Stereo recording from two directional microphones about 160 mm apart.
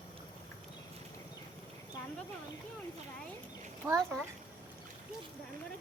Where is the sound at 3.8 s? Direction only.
10° right (ahead or behind).